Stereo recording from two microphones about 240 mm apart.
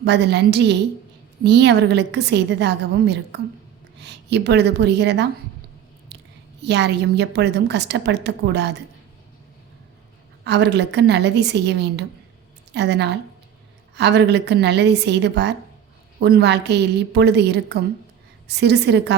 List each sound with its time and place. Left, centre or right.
0.0 s a woman's voice: right
6.6 s a woman's voice: right
10.4 s a woman's voice: right